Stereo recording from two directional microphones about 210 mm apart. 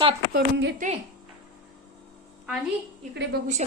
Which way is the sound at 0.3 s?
45° right (ahead or behind).